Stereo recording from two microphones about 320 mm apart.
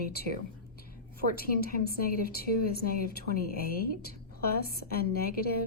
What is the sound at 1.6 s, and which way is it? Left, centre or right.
A woman's voice, left.